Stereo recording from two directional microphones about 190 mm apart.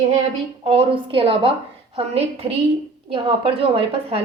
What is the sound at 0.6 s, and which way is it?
A woman's voice, 30° right (ahead or behind).